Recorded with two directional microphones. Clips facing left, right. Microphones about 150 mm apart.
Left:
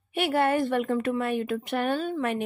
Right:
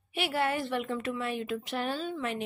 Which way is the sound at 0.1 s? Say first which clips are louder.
Left 6 dB; 50° left (ahead or behind).